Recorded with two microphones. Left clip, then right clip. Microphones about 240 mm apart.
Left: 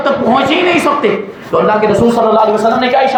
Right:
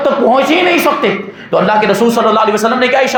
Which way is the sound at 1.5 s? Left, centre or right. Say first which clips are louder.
Even; right.